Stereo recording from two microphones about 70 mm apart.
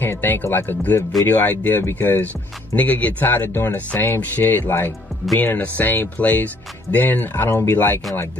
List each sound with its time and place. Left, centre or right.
0.0 s speech: left